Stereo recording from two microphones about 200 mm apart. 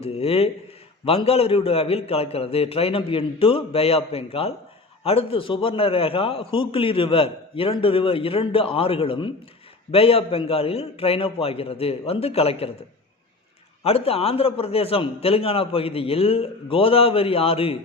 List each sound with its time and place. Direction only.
0.0 s a man's voice: 30° left (ahead or behind)
13.8 s a man's voice: 30° left (ahead or behind)